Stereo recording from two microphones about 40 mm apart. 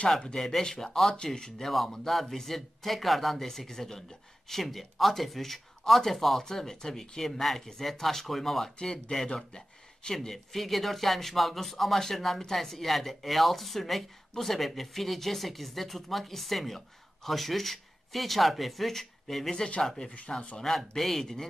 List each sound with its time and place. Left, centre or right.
0.3 s speech: centre
1.7 s speech: centre
8.7 s speech: left
9.1 s speech: centre
20.3 s speech: left
20.7 s speech: centre